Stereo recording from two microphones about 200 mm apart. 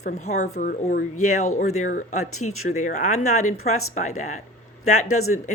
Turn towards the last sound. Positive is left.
turn(degrees=90)